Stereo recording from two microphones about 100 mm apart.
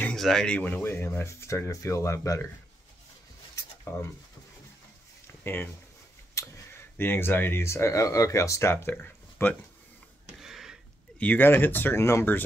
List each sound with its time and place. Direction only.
0.1 s speech: 5° left (ahead or behind); by 2.4 s 30° left (ahead or behind)
5.4 s speech: 20° left (ahead or behind)
6.4 s a sound: 30° left (ahead or behind)
7.0 s speech: 20° left (ahead or behind)
10.4 s a sound: 5° right (ahead or behind)
11.1 s speech: 20° left (ahead or behind)